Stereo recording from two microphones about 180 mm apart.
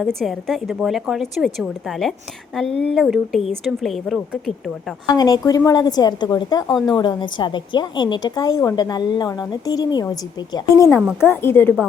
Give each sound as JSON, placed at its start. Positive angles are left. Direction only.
{"t": 0.2, "sound": "a woman's voice", "side_deg": 0}
{"t": 5.1, "sound": "a woman's voice", "side_deg": 20}